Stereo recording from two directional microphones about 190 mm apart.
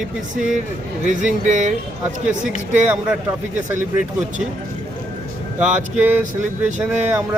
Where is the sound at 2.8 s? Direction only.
5° right (ahead or behind).